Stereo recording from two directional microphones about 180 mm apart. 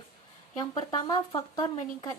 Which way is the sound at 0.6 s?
25° left (ahead or behind).